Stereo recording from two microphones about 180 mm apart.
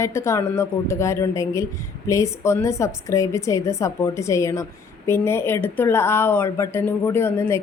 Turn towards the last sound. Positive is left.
turn(degrees=15)  # may be behind; listen again after turning